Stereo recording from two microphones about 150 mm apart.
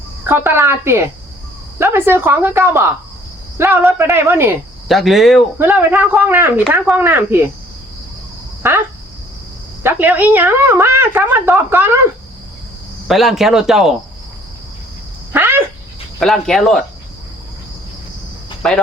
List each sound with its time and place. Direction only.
0.3 s a woman's voice: 15° right (ahead or behind)
4.9 s speech: centre (ahead or behind)
5.5 s a woman's voice: 15° right (ahead or behind)
9.8 s a woman's voice: 10° right (ahead or behind)
13.1 s speech: centre (ahead or behind)
15.3 s a sound: 15° right (ahead or behind)
16.2 s speech: centre (ahead or behind)
18.6 s speech: 5° left (ahead or behind)